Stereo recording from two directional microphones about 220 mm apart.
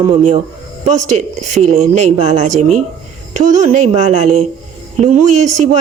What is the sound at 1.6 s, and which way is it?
Speech, 90° right.